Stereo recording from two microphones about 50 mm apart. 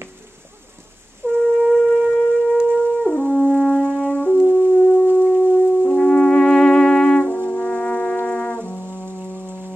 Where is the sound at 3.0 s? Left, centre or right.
Left.